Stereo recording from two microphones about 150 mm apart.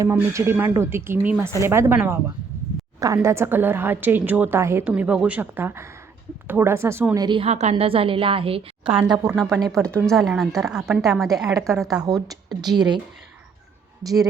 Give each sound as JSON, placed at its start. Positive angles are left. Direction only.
{"t": 0.0, "sound": "a woman's voice", "side_deg": -20}
{"t": 7.3, "sound": "a woman's voice", "side_deg": -35}
{"t": 7.5, "sound": "a woman's voice", "side_deg": -45}
{"t": 9.6, "sound": "a woman's voice", "side_deg": 5}
{"t": 12.0, "sound": "a woman's voice", "side_deg": -25}
{"t": 14.0, "sound": "a woman's voice", "side_deg": -25}